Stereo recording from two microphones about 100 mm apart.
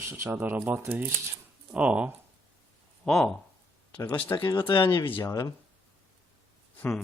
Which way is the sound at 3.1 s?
5° left (ahead or behind).